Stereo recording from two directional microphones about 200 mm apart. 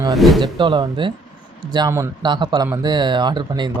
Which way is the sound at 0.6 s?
25° right (ahead or behind).